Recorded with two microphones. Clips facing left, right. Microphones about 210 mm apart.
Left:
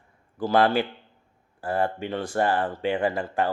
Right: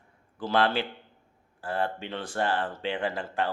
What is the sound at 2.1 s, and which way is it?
Speech, 10° left (ahead or behind).